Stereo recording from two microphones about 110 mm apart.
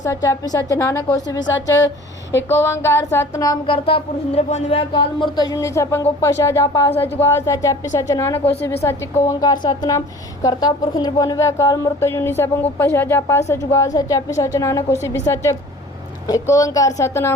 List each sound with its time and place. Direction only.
0.0 s a woman's voice: 30° left (ahead or behind)
2.3 s speech: 20° left (ahead or behind)
3.7 s speech: 55° left (ahead or behind); by 4.8 s 80° left
4.9 s a woman's voice: 45° left (ahead or behind); by 17.3 s 25° left (ahead or behind)